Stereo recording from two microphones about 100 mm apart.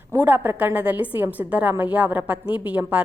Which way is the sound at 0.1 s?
20° right (ahead or behind).